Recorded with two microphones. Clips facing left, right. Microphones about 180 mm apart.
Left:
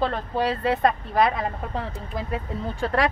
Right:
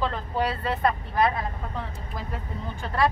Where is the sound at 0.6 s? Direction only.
75° left (ahead or behind).